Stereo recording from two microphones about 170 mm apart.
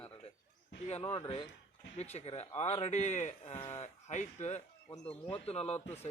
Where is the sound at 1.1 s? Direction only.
30° left (ahead or behind).